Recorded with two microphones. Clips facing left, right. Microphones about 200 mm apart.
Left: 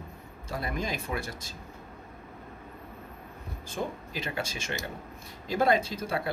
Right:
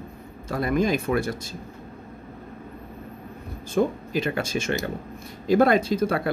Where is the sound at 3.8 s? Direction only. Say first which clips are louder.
Right 11 dB; 65° right (ahead or behind).